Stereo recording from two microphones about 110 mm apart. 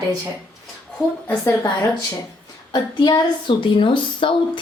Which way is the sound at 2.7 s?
40° left (ahead or behind).